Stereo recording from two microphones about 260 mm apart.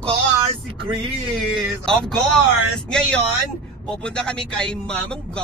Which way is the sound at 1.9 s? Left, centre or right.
Centre.